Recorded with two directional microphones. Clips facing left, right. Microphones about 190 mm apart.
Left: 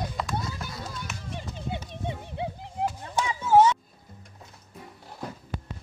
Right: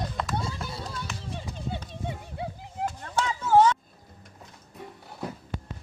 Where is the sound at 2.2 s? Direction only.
20° left (ahead or behind).